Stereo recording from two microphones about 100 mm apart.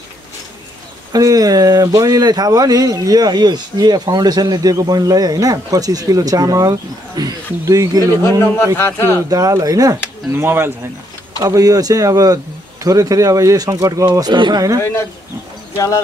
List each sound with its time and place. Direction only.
1.1 s speech: 40° right (ahead or behind)
8.7 s a man's voice: 25° left (ahead or behind)
9.3 s speech: 35° right (ahead or behind)
10.3 s speech: 25° right (ahead or behind)
11.4 s speech: 35° right (ahead or behind)
14.8 s a man's voice: 25° left (ahead or behind)